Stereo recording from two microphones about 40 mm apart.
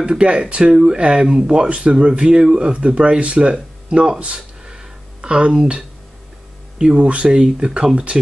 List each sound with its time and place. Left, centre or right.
0.0 s speech: right
4.6 s a sound: right
6.8 s speech: centre